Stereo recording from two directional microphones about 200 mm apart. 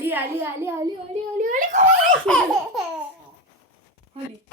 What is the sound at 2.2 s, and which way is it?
Speech, 5° left (ahead or behind).